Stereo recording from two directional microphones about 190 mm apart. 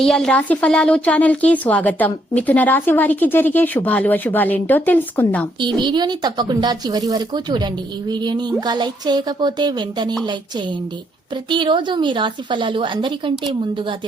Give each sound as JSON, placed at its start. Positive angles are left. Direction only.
{"t": 0.0, "sound": "speech", "side_deg": 0}
{"t": 5.5, "sound": "a woman's voice", "side_deg": -25}
{"t": 11.4, "sound": "a woman's voice", "side_deg": -25}